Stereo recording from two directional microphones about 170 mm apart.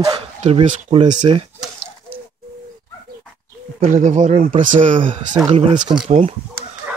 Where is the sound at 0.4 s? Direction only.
40° right (ahead or behind).